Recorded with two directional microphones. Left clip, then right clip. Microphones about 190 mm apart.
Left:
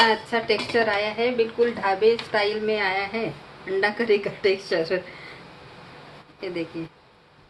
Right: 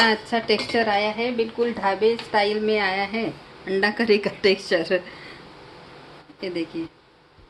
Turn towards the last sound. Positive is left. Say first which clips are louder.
# right 2 dB
turn(degrees=-35)  # may be behind; listen again after turning